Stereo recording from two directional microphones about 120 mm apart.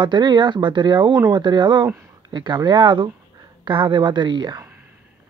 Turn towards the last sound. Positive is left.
turn(degrees=-40)  # may be behind; listen again after turning